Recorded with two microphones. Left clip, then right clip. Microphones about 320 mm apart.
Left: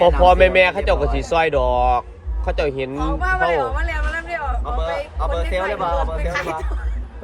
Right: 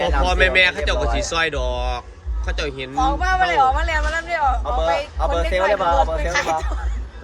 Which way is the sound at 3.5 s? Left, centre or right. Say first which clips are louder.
Right 5 dB; right.